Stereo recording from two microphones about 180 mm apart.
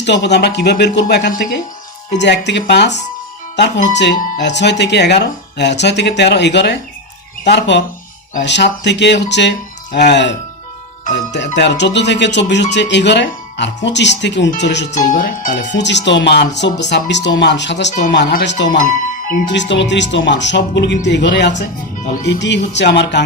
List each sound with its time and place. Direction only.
0.0 s speech: 75° left (ahead or behind)
11.3 s speech: 75° left (ahead or behind)
14.8 s speech: 45° left (ahead or behind)
15.7 s speech: 75° left (ahead or behind)